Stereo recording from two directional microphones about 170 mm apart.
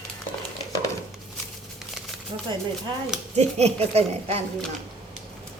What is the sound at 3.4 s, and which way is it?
A woman's voice, 40° right (ahead or behind).